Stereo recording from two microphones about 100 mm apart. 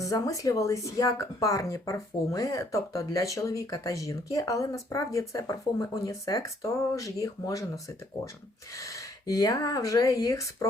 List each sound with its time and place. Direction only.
0.0 s speech: 35° left (ahead or behind)
8.7 s speech: 30° left (ahead or behind)